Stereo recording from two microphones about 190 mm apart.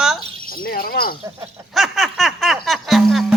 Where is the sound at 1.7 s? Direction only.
Centre (ahead or behind).